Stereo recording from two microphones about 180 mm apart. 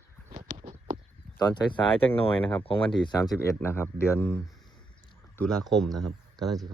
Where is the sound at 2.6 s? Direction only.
30° left (ahead or behind).